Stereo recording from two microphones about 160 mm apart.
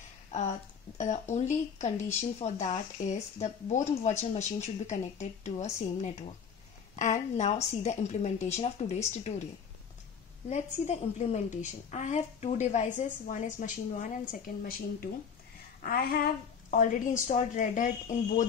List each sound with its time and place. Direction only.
0.3 s speech: 45° left (ahead or behind)
10.5 s speech: 45° left (ahead or behind)
15.8 s speech: 70° left (ahead or behind)
16.7 s speech: 55° left (ahead or behind)